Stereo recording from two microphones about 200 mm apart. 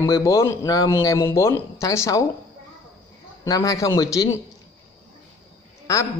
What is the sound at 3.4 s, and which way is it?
Speech, 15° left (ahead or behind).